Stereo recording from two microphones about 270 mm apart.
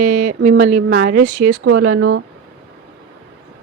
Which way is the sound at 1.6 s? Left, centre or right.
Right.